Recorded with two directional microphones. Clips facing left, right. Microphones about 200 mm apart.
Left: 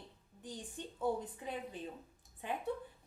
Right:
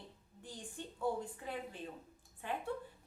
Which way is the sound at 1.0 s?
20° left (ahead or behind).